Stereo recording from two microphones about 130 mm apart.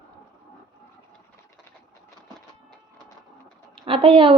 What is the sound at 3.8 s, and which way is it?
Speech, 40° right (ahead or behind).